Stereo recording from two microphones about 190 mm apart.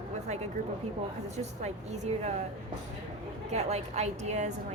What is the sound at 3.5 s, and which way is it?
A woman's voice, 35° right (ahead or behind).